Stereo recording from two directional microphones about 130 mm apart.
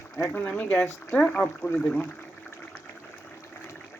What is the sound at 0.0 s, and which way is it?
Speech, 20° left (ahead or behind).